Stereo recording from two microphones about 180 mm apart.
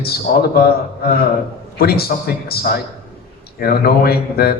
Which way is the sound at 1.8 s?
60° left (ahead or behind).